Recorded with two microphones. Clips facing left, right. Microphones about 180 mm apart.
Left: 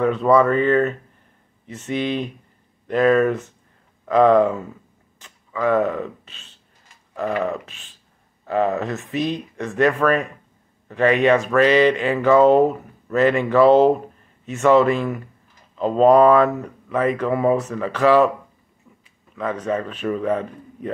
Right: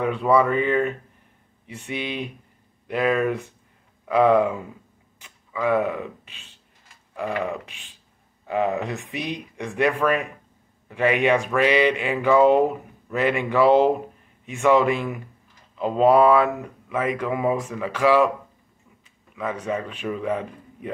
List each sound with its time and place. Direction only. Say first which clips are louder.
0.0 s speech: left 4 dB; 10° right (ahead or behind)
19.3 s speech: left 3 dB; 10° right (ahead or behind)